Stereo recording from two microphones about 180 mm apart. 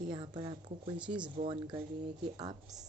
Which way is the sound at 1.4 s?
40° right (ahead or behind).